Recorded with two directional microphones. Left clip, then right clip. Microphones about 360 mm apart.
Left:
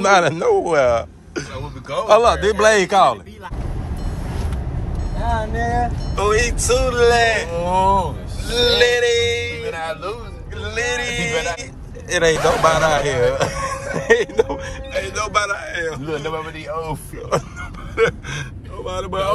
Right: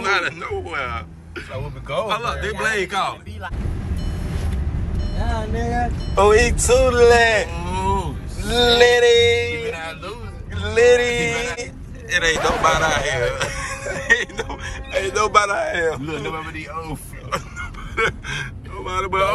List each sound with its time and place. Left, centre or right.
0.0 s speech: centre
2.0 s speech: centre
6.1 s speech: centre
7.5 s a man's voice: left
8.5 s speech: centre
9.7 s music: left
10.6 s speech: centre
12.1 s speech: centre
14.9 s speech: centre
16.1 s a man's voice: left
17.3 s a sound: centre
18.9 s speech: centre